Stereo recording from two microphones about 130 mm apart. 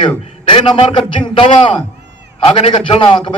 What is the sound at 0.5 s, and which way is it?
A man's voice, 40° left (ahead or behind).